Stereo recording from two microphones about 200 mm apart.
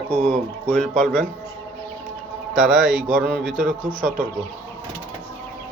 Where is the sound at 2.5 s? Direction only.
Centre (ahead or behind).